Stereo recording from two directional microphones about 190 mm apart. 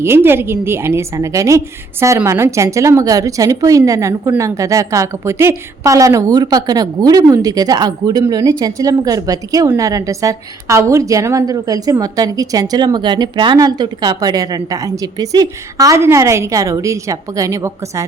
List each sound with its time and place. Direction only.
0.0 s a woman's voice: 10° right (ahead or behind)